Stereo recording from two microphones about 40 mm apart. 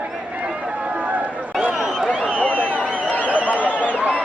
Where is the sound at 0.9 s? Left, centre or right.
Right.